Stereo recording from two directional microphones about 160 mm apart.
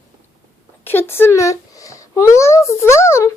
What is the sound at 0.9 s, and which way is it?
Speech, 15° left (ahead or behind).